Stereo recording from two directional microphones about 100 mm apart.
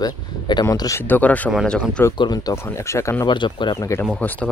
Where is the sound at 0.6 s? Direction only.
35° left (ahead or behind).